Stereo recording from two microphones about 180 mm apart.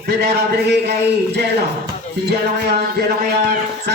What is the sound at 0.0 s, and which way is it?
Speech, 65° right (ahead or behind).